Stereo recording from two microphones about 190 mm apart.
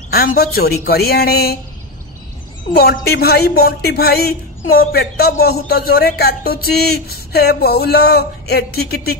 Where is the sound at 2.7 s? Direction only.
55° left (ahead or behind).